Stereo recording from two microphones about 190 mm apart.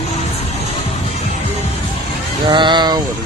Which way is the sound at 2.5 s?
25° right (ahead or behind).